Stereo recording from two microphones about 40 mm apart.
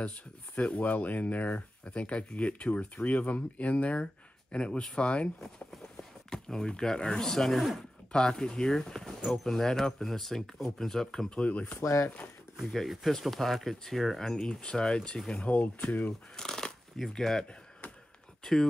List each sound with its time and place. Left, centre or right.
0.0 s speech: left
6.3 s a sound: centre
7.2 s speech: centre
11.2 s speech: left
11.8 s speech: left
12.6 s speech: centre
15.3 s speech: left
16.1 s speech: centre